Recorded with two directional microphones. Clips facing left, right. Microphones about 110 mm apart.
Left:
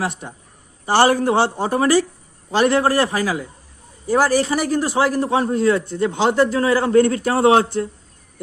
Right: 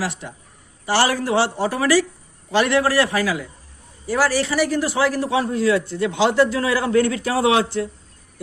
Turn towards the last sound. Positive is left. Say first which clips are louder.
# left 3 dB
turn(degrees=40)  # may be behind; listen again after turning